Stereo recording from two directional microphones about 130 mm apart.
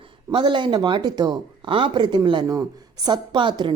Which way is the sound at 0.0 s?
40° right (ahead or behind).